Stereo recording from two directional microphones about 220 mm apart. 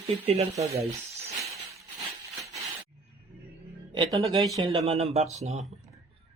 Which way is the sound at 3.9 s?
20° right (ahead or behind).